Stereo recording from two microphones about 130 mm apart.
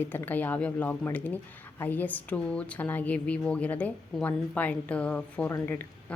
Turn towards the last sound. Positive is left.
turn(degrees=15)  # may be behind; listen again after turning